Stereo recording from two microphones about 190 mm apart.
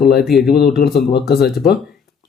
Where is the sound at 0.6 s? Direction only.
55° left (ahead or behind).